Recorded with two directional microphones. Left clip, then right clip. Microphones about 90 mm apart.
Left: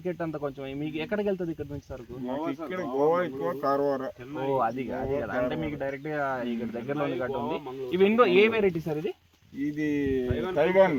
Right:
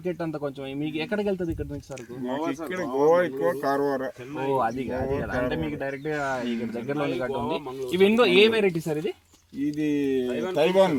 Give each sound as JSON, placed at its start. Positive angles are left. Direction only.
{"t": 0.0, "sound": "speech", "side_deg": -5}
{"t": 2.5, "sound": "speech", "side_deg": 35}
{"t": 3.6, "sound": "speech", "side_deg": 45}
{"t": 4.4, "sound": "speech", "side_deg": 5}
{"t": 7.9, "sound": "speech", "side_deg": -25}
{"t": 9.8, "sound": "speech", "side_deg": -25}